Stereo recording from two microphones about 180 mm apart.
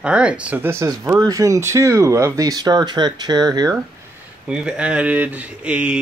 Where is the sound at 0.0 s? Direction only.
5° right (ahead or behind); by 3.8 s 20° right (ahead or behind).